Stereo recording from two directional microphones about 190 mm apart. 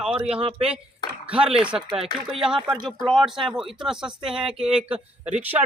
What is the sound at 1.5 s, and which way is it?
Speech, 5° right (ahead or behind).